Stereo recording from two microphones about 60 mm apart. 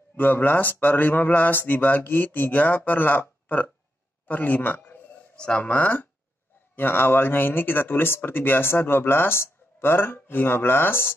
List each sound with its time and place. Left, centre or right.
0.1 s speech: left
5.3 s a sound: centre
5.6 s speech: left
6.7 s speech: left